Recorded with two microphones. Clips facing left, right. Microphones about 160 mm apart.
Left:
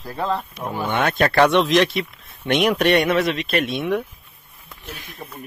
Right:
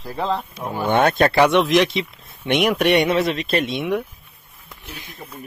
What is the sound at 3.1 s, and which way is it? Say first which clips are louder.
Speech: right 1 dB; 30° right (ahead or behind).